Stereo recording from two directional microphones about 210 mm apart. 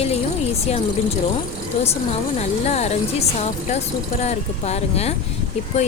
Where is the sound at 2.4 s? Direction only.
30° left (ahead or behind).